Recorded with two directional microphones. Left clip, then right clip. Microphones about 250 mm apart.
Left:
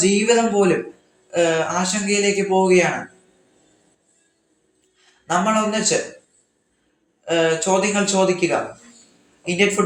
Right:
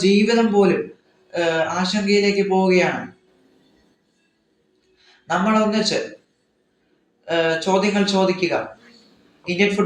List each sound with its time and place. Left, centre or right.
0.0 s speech: left
5.2 s speech: left
7.3 s a man's voice: left